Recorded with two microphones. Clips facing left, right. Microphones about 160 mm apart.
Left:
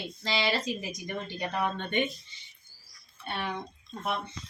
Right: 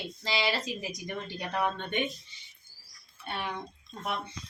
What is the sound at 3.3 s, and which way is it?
Speech, 5° right (ahead or behind).